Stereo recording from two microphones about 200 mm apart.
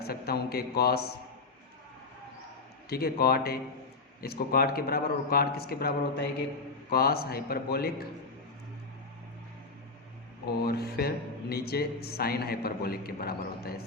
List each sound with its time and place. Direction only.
0.0 s speech: 50° left (ahead or behind)
2.9 s speech: 50° left (ahead or behind)
10.6 s speech: 50° left (ahead or behind)